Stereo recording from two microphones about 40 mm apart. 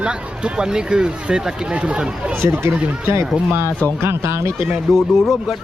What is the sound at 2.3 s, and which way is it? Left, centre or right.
Speech, right.